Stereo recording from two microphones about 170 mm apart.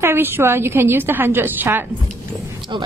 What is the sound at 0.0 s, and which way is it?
A woman's voice, 15° right (ahead or behind).